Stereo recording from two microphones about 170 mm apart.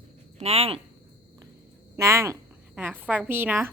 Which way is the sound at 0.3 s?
35° right (ahead or behind).